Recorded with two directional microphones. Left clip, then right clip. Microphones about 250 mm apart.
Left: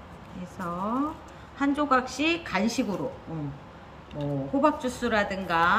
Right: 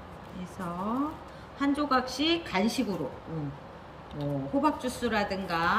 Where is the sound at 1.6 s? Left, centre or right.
Centre.